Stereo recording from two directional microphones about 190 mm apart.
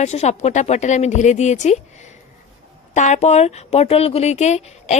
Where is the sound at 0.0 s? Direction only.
35° left (ahead or behind).